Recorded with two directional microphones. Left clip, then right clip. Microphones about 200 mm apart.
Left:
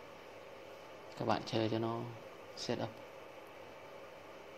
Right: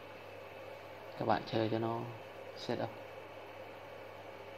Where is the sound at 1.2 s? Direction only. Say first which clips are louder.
Right 2 dB; 15° left (ahead or behind).